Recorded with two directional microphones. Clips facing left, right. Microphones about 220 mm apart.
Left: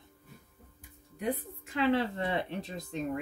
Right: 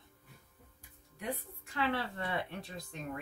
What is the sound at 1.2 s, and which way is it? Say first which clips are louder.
Speech: left 7 dB; 20° left (ahead or behind).